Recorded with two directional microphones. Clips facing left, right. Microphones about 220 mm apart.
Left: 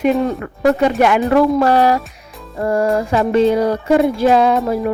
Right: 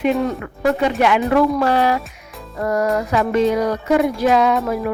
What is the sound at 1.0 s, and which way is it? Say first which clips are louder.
Speech: left 2 dB; 45° left (ahead or behind).